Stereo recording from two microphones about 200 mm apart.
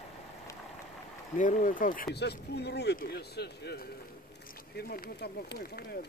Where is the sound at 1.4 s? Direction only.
40° left (ahead or behind).